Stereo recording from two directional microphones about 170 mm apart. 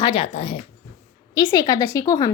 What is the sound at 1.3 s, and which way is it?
A woman's voice, 20° left (ahead or behind).